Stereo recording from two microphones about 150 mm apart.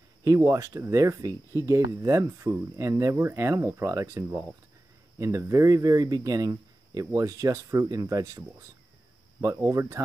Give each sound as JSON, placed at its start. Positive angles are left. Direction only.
{"t": 0.2, "sound": "speech", "side_deg": -20}